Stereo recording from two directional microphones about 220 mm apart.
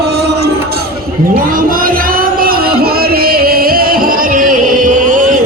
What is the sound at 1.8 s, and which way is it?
Music, 40° right (ahead or behind).